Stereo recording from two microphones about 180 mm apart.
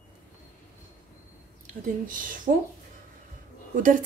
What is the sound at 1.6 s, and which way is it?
Speech, 50° right (ahead or behind).